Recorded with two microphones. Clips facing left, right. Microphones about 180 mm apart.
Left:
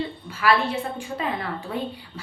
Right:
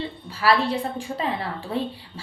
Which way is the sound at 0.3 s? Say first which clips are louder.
Right 1 dB; 35° right (ahead or behind).